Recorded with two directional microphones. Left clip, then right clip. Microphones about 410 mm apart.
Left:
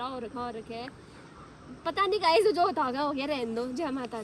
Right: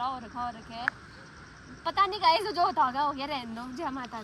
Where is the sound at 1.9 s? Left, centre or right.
Left.